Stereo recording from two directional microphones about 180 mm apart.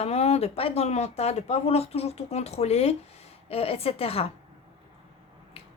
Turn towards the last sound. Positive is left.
turn(degrees=35)  # may be behind; listen again after turning